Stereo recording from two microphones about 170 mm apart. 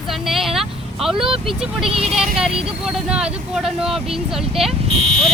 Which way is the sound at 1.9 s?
35° right (ahead or behind).